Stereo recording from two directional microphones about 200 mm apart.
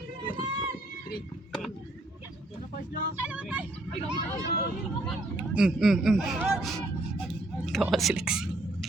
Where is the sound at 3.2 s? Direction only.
5° right (ahead or behind).